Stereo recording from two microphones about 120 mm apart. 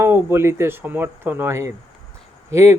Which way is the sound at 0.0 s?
20° right (ahead or behind).